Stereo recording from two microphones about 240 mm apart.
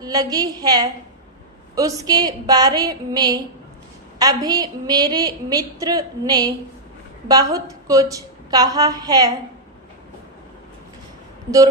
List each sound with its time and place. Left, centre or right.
0.0 s a woman's voice: centre